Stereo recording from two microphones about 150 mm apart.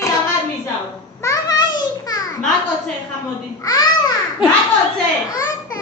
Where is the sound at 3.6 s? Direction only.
25° left (ahead or behind).